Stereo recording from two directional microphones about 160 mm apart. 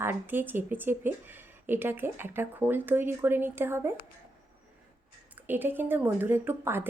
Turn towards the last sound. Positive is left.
turn(degrees=-15)  # may be behind; listen again after turning